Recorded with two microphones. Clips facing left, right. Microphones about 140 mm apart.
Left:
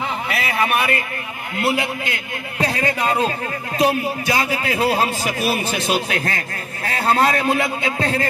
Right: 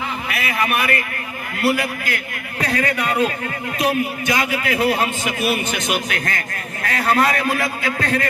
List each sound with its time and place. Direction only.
0.3 s a man's voice: 30° left (ahead or behind)